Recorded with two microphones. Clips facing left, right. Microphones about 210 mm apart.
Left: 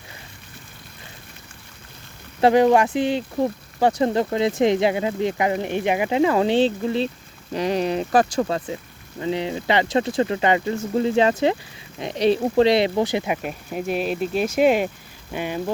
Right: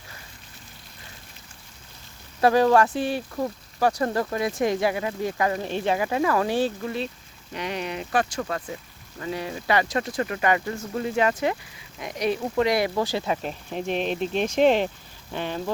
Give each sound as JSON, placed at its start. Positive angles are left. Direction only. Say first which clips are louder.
{"t": 2.4, "sound": "speech", "louder": "left 3 dB", "side_deg": 20}